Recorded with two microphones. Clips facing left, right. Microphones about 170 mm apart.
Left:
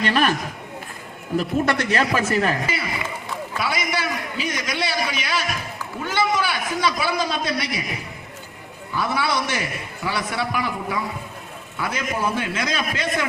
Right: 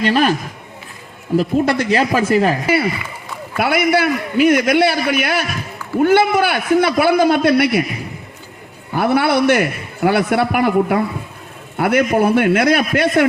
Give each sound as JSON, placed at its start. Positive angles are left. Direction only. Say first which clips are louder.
{"t": 0.0, "sound": "speech", "louder": "right 5 dB", "side_deg": -35}
{"t": 1.4, "sound": "speech", "louder": "right 5 dB", "side_deg": -35}
{"t": 3.6, "sound": "a man's voice", "louder": "right 11 dB", "side_deg": -60}
{"t": 8.9, "sound": "a man's voice", "louder": "right 8 dB", "side_deg": -60}